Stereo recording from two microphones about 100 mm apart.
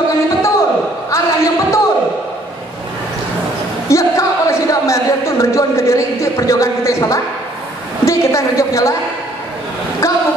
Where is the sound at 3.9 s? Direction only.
30° left (ahead or behind).